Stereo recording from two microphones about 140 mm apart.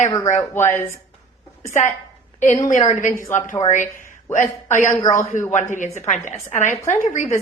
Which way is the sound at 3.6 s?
65° left (ahead or behind).